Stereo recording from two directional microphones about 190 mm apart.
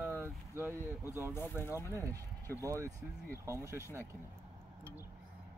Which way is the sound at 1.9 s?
15° right (ahead or behind).